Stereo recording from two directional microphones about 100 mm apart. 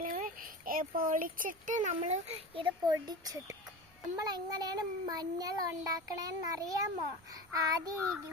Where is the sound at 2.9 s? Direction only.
40° right (ahead or behind).